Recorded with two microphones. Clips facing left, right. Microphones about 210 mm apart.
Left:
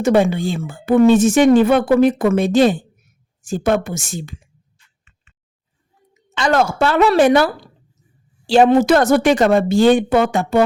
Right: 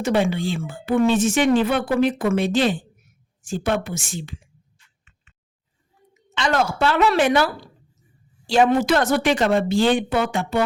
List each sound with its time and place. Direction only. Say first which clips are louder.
0.0 s speech: left 6 dB; 45° left (ahead or behind)
6.3 s speech: left 5 dB; 45° left (ahead or behind)